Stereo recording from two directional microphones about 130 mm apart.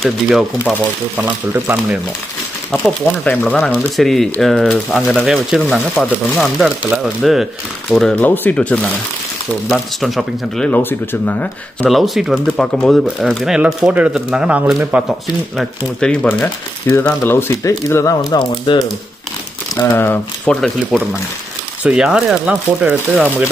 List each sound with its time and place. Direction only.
0.0 s speech: centre (ahead or behind)
1.1 s speech: 15° right (ahead or behind)
3.3 s speech: 10° left (ahead or behind)
9.7 s speech: centre (ahead or behind)
10.7 s speech: 15° left (ahead or behind)
11.9 s speech: centre (ahead or behind); by 18.5 s 30° left (ahead or behind)
19.9 s speech: 15° left (ahead or behind)
20.6 s speech: 5° left (ahead or behind); by 23.5 s 15° right (ahead or behind)